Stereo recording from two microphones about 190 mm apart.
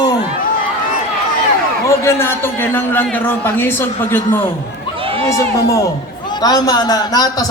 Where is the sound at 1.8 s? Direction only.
15° left (ahead or behind).